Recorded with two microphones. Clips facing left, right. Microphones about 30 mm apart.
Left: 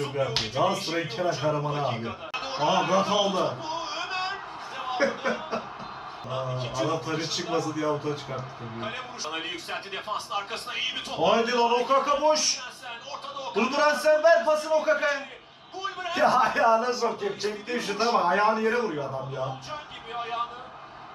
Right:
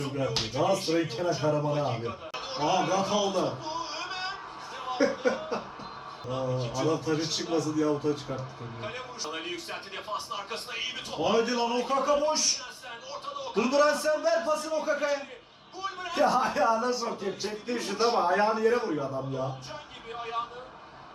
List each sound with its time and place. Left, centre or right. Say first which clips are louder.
0.0 s speech: left 3 dB; left
3.2 s a man's voice: left 2 dB; left
3.6 s a sound: left 3 dB; left
4.0 s a sound: left 4 dB; left
4.8 s chuckle: even; left
6.6 s a man's voice: left 2 dB; left
6.9 s speech: even; left
8.8 s a man's voice: left 3 dB; left; by 19.4 s centre
19.4 s a man's voice: left 2 dB; left